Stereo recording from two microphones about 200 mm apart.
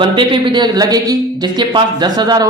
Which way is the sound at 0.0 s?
25° right (ahead or behind).